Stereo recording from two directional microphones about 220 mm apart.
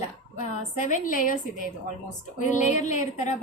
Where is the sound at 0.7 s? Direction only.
35° left (ahead or behind).